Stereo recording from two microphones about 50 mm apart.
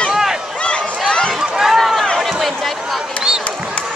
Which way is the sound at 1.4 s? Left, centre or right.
Centre.